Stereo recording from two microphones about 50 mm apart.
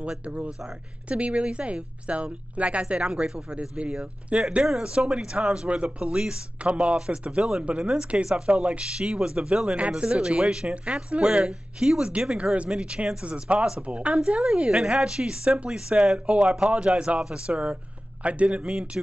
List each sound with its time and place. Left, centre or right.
0.2 s speech: right